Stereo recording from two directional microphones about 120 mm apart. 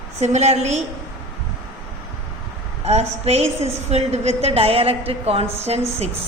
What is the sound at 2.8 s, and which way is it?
A woman's voice, 60° right (ahead or behind).